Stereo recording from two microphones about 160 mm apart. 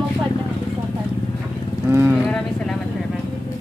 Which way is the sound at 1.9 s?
15° right (ahead or behind).